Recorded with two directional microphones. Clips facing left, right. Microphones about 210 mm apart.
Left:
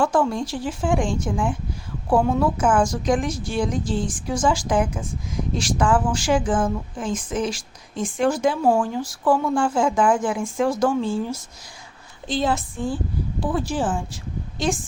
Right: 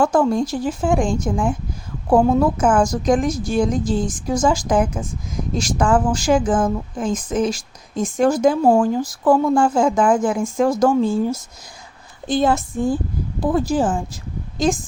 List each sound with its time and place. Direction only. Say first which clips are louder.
0.0 s speech: right 4 dB; 40° right (ahead or behind)